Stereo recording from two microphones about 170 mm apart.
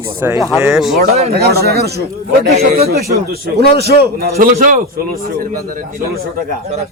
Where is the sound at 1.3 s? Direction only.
65° right (ahead or behind).